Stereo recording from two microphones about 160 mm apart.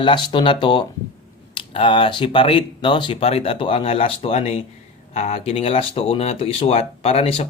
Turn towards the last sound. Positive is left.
turn(degrees=35)  # may be behind; listen again after turning